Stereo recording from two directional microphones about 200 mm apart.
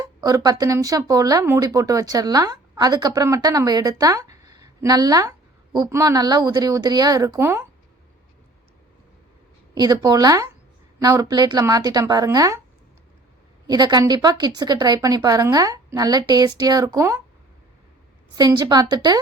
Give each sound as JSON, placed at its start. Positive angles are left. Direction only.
{"t": 0.0, "sound": "a woman's voice", "side_deg": -20}
{"t": 9.7, "sound": "a woman's voice", "side_deg": -20}
{"t": 13.7, "sound": "a woman's voice", "side_deg": -20}
{"t": 18.3, "sound": "a woman's voice", "side_deg": -20}